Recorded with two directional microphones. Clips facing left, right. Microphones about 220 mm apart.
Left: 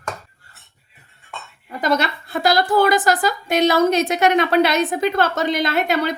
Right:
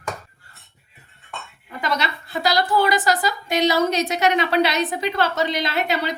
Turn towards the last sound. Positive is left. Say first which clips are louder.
# left 4 dB
turn(degrees=50)  # may be behind; listen again after turning